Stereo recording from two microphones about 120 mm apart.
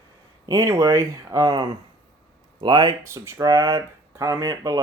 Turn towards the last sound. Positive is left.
turn(degrees=-30)  # may be behind; listen again after turning